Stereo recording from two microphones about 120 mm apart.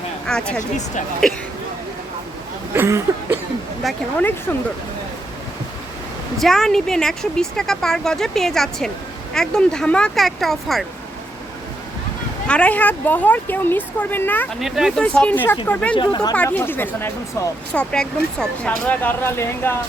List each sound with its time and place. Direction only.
0.3 s speech: 5° left (ahead or behind)
2.7 s a sound: 20° right (ahead or behind)
3.8 s speech: centre (ahead or behind)
6.4 s speech: centre (ahead or behind)
12.5 s speech: 10° left (ahead or behind)
14.6 s speech: 5° right (ahead or behind)
15.0 s speech: 10° left (ahead or behind)
16.0 s speech: 35° left (ahead or behind)
16.3 s speech: 15° left (ahead or behind)
17.7 s speech: 5° left (ahead or behind); by 19.8 s 20° left (ahead or behind)